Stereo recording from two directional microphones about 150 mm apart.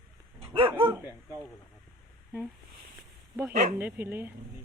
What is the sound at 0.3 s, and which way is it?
Dog, 35° right (ahead or behind).